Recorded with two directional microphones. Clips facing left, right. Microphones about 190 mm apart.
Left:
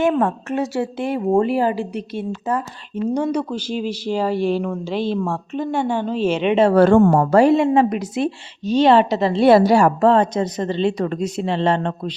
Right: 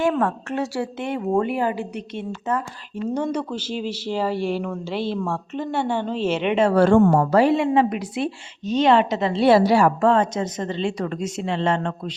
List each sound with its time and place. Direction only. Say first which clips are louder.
0.0 s a woman's voice: left 3 dB; 20° left (ahead or behind)
1.7 s a woman's voice: left 4 dB; 15° right (ahead or behind)
2.1 s a woman's voice: left 2 dB; 30° left (ahead or behind)
3.2 s speech: left 2 dB; 10° left (ahead or behind)
6.7 s a woman's voice: left 1 dB; 55° left (ahead or behind); by 12.1 s 35° left (ahead or behind)